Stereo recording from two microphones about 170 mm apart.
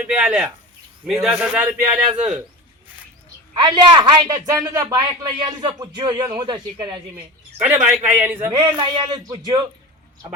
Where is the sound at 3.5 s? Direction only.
25° right (ahead or behind).